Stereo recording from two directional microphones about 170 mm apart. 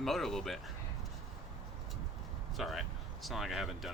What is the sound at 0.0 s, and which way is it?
Speech, centre (ahead or behind).